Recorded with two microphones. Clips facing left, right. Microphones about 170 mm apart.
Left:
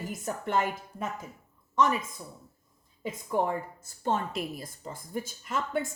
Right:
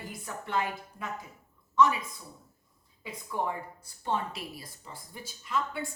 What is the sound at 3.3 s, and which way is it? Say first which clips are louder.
A woman's voice: left 5 dB; 45° left (ahead or behind).